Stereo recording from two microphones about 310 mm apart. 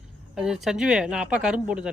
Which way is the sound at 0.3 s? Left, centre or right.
Centre.